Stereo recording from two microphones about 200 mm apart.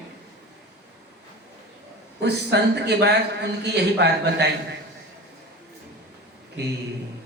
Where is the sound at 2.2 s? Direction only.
55° right (ahead or behind).